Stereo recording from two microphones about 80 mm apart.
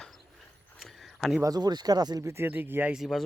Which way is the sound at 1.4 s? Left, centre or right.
Right.